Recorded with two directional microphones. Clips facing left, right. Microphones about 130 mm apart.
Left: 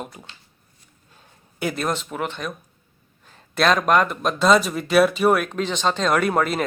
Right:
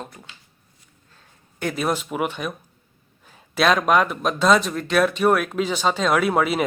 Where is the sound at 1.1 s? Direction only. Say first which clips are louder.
Left 3 dB; 10° left (ahead or behind).